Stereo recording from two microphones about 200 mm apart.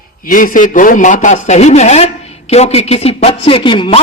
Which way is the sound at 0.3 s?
45° left (ahead or behind).